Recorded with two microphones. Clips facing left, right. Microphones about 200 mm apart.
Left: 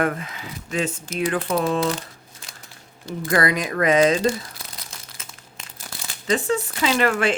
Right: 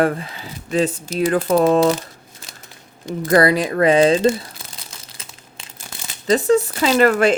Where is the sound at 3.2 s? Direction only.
35° right (ahead or behind).